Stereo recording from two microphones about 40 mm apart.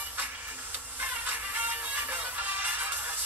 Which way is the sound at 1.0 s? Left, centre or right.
Right.